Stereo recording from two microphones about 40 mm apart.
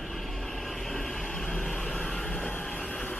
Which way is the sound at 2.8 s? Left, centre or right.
Left.